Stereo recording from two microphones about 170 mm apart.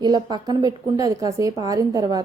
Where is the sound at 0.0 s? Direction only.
25° right (ahead or behind).